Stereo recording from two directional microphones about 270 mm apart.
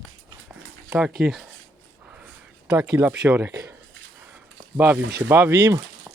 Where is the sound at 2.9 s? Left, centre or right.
Centre.